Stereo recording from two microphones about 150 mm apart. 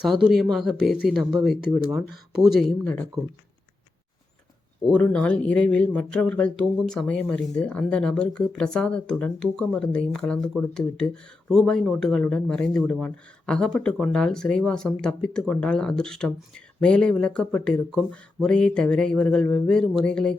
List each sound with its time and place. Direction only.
0.1 s speech: 5° right (ahead or behind)
4.9 s speech: 10° left (ahead or behind)